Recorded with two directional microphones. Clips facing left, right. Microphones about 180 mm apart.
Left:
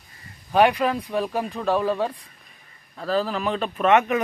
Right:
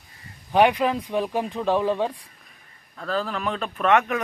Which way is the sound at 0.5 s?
15° right (ahead or behind).